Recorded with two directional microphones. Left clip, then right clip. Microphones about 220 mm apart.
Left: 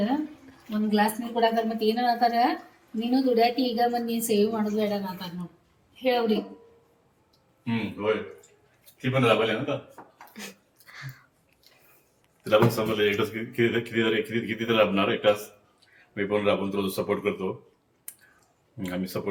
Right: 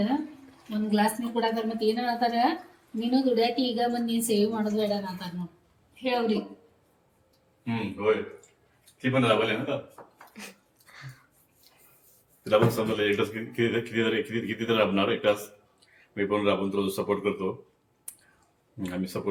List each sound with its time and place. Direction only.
0.9 s a woman's voice: 10° left (ahead or behind)
7.6 s speech: 5° right (ahead or behind)
10.3 s a sound: 5° left (ahead or behind)
12.5 s speech: 5° left (ahead or behind)
18.8 s speech: centre (ahead or behind)